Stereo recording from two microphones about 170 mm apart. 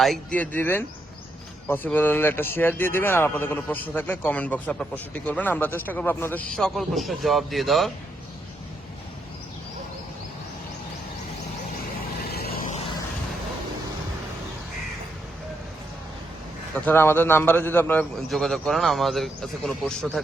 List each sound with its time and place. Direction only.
0.0 s speech: 5° left (ahead or behind)
12.3 s vehicle: 65° left (ahead or behind)
16.7 s speech: 10° left (ahead or behind)
18.3 s speech: centre (ahead or behind)